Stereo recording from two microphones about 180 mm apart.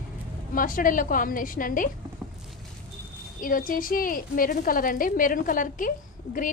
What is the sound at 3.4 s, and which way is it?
A woman's voice, 50° left (ahead or behind).